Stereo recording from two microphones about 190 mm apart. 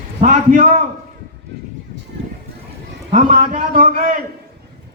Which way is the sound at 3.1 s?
40° right (ahead or behind).